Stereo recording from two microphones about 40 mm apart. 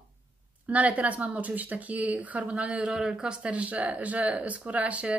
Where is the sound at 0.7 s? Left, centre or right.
Right.